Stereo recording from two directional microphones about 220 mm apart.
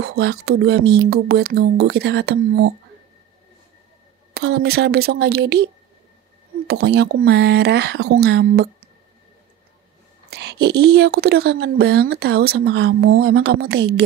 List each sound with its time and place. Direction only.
0.0 s speech: 50° right (ahead or behind)
4.3 s speech: 45° right (ahead or behind)
6.7 s speech: 50° right (ahead or behind)
10.3 s speech: 50° right (ahead or behind)